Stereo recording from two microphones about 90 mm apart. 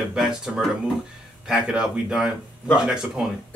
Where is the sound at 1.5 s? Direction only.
10° right (ahead or behind).